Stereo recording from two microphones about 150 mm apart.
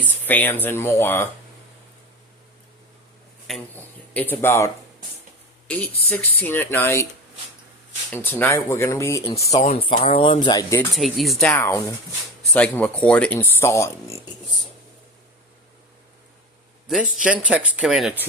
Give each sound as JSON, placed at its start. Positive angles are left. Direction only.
{"t": 0.0, "sound": "speech", "side_deg": 10}
{"t": 3.8, "sound": "speech", "side_deg": 10}
{"t": 8.1, "sound": "speech", "side_deg": 15}
{"t": 9.5, "sound": "speech", "side_deg": 45}
{"t": 10.9, "sound": "speech", "side_deg": 0}
{"t": 11.5, "sound": "speech", "side_deg": 20}
{"t": 12.5, "sound": "speech", "side_deg": 10}
{"t": 16.8, "sound": "speech", "side_deg": -5}